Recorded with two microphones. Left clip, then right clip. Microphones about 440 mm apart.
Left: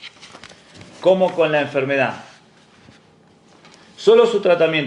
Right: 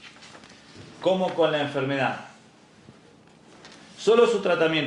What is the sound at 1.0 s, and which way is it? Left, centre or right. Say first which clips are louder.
Speech: left 8 dB; left.